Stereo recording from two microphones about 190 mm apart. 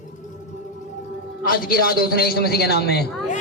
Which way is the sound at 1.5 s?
50° left (ahead or behind).